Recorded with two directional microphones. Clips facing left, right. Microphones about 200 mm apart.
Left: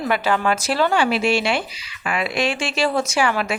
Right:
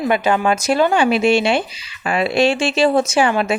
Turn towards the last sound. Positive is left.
turn(degrees=-25)  # may be behind; listen again after turning